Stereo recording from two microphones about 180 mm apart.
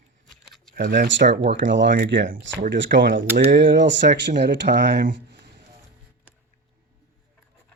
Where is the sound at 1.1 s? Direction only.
75° right (ahead or behind).